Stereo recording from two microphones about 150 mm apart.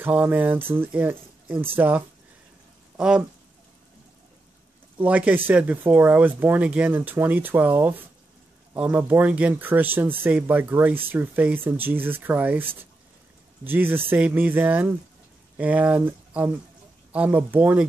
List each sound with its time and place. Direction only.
0.0 s speech: 10° right (ahead or behind)
4.9 s speech: 10° right (ahead or behind)